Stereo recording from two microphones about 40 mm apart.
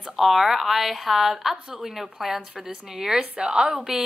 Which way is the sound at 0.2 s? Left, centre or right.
Centre.